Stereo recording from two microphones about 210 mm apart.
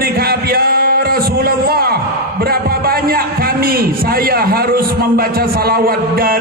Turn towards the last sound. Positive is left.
turn(degrees=-45)  # may be behind; listen again after turning